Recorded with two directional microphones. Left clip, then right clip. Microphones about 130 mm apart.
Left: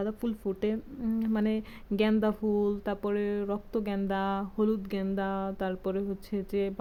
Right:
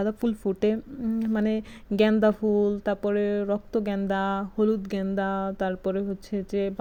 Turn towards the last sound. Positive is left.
turn(degrees=-15)  # may be behind; listen again after turning